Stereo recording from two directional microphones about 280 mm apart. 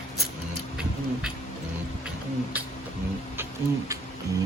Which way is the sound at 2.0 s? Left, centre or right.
Centre.